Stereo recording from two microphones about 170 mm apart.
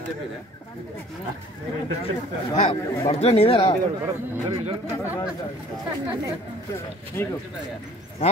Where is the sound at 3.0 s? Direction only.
40° left (ahead or behind).